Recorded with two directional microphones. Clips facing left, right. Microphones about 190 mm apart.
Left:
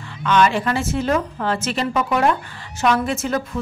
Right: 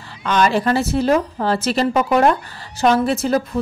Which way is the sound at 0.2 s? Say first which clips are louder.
Even; 35° right (ahead or behind).